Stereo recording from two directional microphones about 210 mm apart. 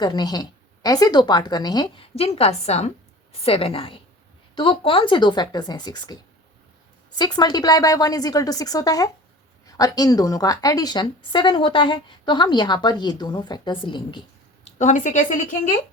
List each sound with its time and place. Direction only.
0.0 s a woman's voice: 20° left (ahead or behind)
7.2 s a woman's voice: 20° left (ahead or behind)
14.8 s speech: 35° left (ahead or behind)